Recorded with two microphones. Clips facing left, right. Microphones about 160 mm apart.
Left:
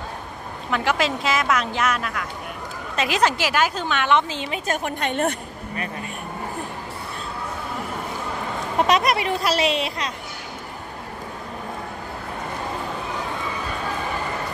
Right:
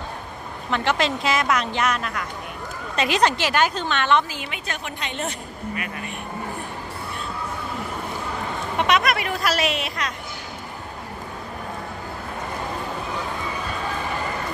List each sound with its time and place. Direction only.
0.7 s a woman's voice: 5° left (ahead or behind); by 4.6 s 25° left (ahead or behind)
4.6 s a woman's voice: 50° left (ahead or behind)
8.7 s speech: 35° left (ahead or behind)